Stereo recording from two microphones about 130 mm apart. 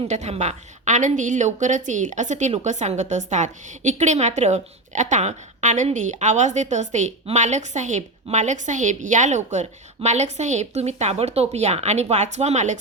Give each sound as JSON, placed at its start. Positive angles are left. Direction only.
{"t": 0.1, "sound": "a woman's voice", "side_deg": -60}